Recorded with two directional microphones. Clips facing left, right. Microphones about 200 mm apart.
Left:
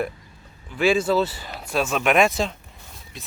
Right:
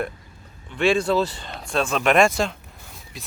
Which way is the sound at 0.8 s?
5° left (ahead or behind).